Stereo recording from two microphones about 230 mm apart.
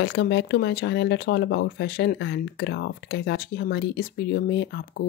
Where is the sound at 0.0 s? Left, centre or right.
Left.